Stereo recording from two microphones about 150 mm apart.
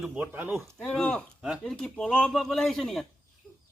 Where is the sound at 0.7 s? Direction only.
5° left (ahead or behind).